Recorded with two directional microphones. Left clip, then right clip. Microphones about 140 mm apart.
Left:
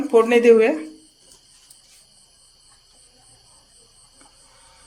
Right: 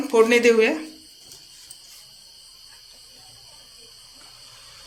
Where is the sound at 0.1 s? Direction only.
90° left.